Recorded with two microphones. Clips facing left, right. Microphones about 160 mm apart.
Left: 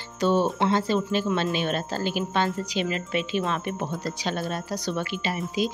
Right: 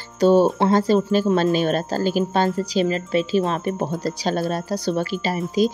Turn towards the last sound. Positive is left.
turn(degrees=-40)  # may be behind; listen again after turning